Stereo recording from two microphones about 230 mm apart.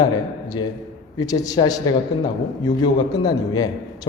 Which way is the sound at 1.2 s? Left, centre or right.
Centre.